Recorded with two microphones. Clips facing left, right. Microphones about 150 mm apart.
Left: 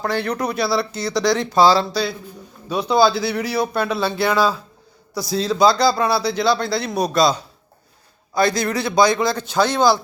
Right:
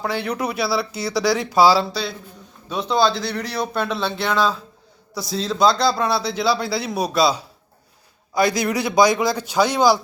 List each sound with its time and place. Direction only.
0.0 s a man's voice: 5° right (ahead or behind)